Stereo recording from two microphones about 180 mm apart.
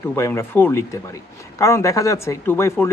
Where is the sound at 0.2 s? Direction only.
15° left (ahead or behind).